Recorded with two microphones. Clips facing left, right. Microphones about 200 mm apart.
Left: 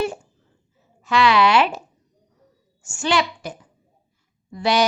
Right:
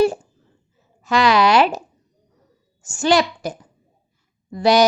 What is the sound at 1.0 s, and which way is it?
Speech, 40° right (ahead or behind).